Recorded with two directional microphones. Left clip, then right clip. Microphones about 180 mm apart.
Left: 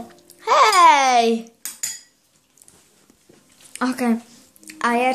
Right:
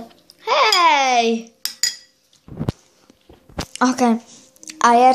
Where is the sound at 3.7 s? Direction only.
20° right (ahead or behind).